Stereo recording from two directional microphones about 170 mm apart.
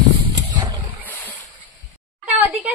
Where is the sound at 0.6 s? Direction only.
25° right (ahead or behind).